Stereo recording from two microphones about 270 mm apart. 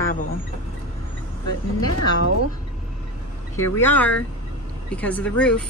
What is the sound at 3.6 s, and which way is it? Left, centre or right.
Speech, centre.